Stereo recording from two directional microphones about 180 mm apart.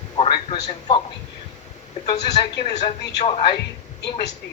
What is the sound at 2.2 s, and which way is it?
A man's voice, 25° left (ahead or behind).